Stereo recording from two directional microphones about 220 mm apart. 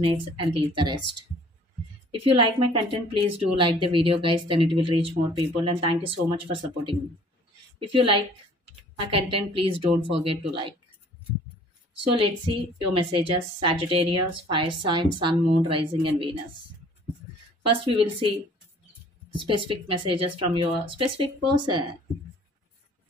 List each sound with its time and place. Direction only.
0.0 s a woman's voice: 25° right (ahead or behind)
2.0 s a woman's voice: 25° right (ahead or behind)
12.1 s a woman's voice: 25° right (ahead or behind)
17.6 s a woman's voice: 25° right (ahead or behind)
19.3 s a woman's voice: 20° right (ahead or behind)